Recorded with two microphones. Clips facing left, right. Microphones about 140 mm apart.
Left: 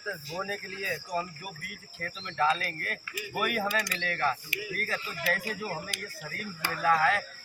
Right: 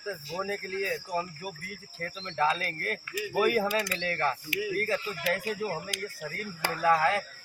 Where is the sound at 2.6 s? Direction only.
40° right (ahead or behind); by 5.4 s 25° right (ahead or behind).